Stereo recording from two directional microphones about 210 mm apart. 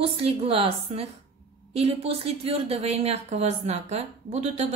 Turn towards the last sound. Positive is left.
turn(degrees=-30)  # may be behind; listen again after turning